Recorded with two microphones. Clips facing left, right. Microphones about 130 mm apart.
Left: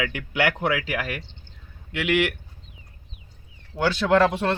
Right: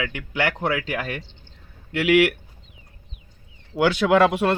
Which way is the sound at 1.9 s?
5° right (ahead or behind).